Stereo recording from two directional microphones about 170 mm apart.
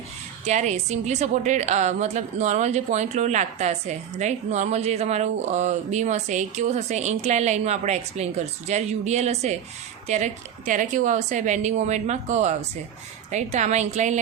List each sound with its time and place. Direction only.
0.4 s a woman's voice: 45° right (ahead or behind)